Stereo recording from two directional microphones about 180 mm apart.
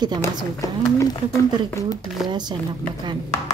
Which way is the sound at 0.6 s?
20° left (ahead or behind).